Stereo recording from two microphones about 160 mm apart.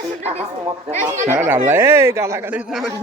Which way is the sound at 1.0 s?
15° right (ahead or behind).